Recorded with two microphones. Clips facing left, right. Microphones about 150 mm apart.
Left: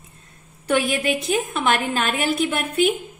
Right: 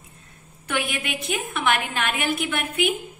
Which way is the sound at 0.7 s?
35° left (ahead or behind).